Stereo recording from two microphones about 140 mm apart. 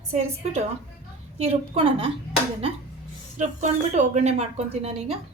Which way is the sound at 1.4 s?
45° right (ahead or behind).